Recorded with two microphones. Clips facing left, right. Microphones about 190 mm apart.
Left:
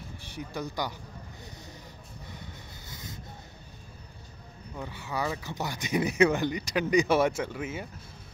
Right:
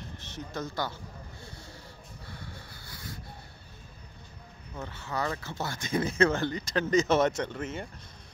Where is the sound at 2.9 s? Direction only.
20° left (ahead or behind).